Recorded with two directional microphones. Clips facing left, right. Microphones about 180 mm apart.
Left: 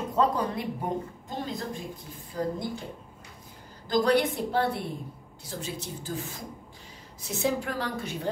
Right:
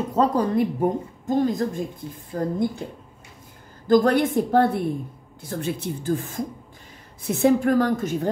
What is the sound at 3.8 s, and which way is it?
A woman's voice, 50° right (ahead or behind).